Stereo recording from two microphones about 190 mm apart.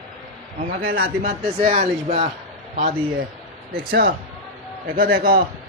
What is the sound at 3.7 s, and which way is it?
Speech, 55° right (ahead or behind).